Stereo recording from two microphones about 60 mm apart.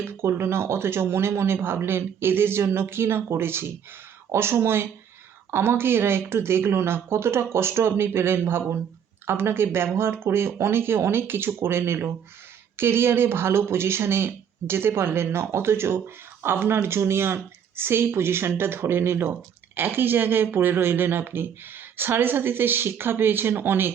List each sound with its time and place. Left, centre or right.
0.0 s speech: right